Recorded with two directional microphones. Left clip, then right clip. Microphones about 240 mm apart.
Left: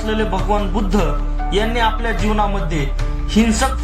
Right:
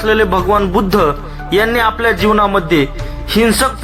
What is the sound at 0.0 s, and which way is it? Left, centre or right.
Speech, right.